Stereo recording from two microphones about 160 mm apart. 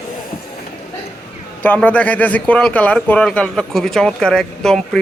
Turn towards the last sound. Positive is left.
turn(degrees=5)  # may be behind; listen again after turning